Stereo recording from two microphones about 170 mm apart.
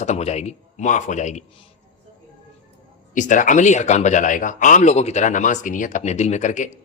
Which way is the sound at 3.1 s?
50° left (ahead or behind).